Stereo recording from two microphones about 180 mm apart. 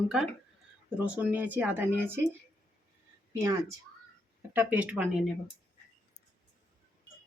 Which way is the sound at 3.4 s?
15° right (ahead or behind).